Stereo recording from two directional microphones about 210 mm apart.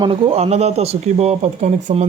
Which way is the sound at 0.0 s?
25° right (ahead or behind).